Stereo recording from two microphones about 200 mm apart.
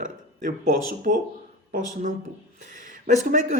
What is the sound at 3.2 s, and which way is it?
Speech, 40° right (ahead or behind).